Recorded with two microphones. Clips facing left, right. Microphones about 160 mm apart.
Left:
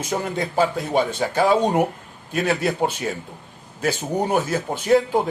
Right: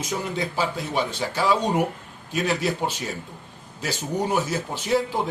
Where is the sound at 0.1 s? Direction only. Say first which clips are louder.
Left 4 dB; 50° left (ahead or behind).